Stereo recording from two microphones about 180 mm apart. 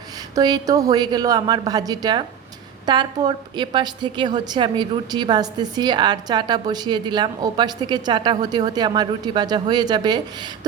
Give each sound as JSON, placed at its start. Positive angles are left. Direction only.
{"t": 0.3, "sound": "a woman's voice", "side_deg": -20}